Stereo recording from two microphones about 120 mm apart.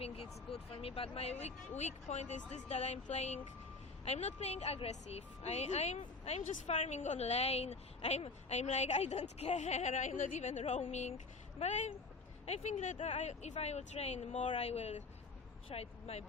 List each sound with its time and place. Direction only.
0.0 s a woman's voice: 55° left (ahead or behind)